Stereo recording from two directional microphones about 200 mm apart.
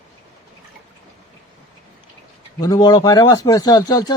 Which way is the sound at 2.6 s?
20° left (ahead or behind).